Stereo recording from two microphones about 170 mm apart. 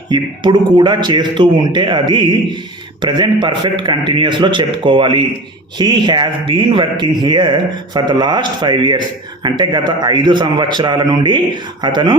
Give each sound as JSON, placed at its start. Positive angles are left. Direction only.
{"t": 0.1, "sound": "a man's voice", "side_deg": -25}